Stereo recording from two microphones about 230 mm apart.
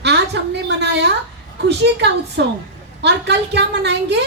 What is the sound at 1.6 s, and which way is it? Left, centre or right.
A woman's voice, right.